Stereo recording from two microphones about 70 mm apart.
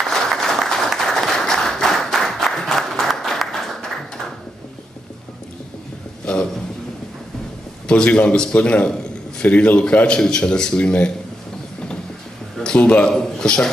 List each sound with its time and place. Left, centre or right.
0.1 s applause: centre
6.3 s a sound: centre
7.9 s speech: centre
12.7 s speech: centre